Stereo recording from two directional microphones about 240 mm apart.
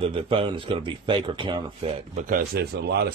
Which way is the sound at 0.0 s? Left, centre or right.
Right.